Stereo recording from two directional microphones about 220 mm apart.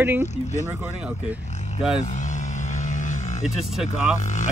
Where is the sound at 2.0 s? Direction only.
35° left (ahead or behind).